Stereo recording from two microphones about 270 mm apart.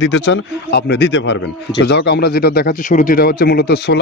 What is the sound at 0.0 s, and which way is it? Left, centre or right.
Speech, left.